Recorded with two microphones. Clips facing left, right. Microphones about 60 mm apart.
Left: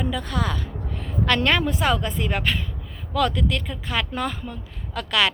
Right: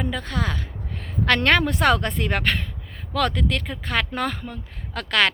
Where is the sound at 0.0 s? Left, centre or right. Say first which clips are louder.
Left 1 dB; right.